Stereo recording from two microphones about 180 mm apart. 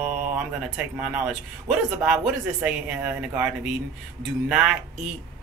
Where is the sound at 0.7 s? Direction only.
5° right (ahead or behind).